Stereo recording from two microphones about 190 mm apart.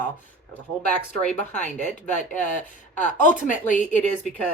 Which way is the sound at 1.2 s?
40° left (ahead or behind).